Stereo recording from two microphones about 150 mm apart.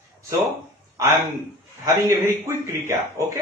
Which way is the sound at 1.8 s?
20° right (ahead or behind).